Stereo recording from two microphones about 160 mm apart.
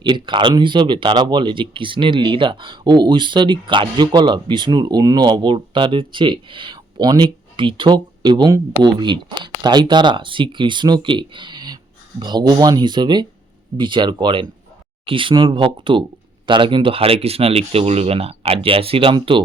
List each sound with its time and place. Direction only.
0.0 s speech: 30° right (ahead or behind)